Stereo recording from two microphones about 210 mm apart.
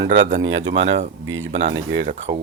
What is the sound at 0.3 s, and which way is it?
Speech, 65° right (ahead or behind).